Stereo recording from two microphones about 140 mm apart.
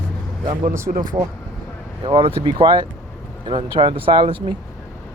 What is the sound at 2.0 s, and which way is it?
Speech, 40° right (ahead or behind).